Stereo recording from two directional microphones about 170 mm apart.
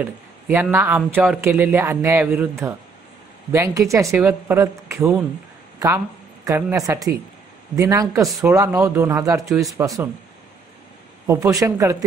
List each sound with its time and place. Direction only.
0.5 s speech: 15° right (ahead or behind)
6.4 s a man's voice: 20° right (ahead or behind)
11.2 s a man's voice: 20° right (ahead or behind)